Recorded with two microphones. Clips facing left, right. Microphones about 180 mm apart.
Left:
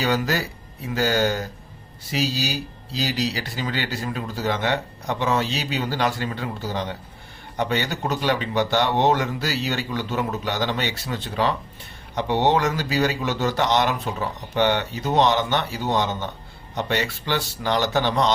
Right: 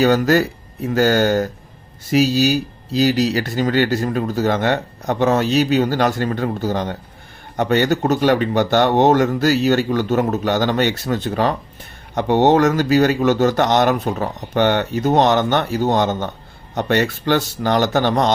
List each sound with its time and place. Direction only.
0.0 s speech: 50° right (ahead or behind)